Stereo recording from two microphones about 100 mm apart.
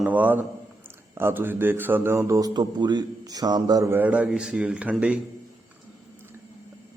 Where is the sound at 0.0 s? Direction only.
15° right (ahead or behind).